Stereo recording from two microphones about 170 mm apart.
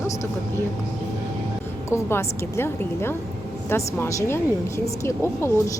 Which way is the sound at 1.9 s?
15° left (ahead or behind).